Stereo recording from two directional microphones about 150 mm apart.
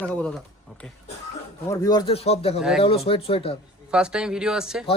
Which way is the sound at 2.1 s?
45° left (ahead or behind).